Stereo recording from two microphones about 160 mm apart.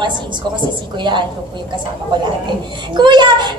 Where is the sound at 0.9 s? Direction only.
30° right (ahead or behind).